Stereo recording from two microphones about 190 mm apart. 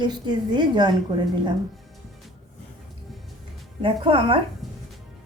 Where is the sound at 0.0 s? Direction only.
25° right (ahead or behind).